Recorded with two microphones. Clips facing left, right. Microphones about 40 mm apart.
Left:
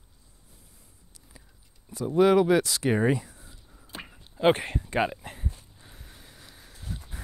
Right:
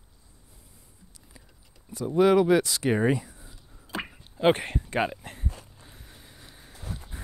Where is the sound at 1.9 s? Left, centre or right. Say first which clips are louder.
Even; centre.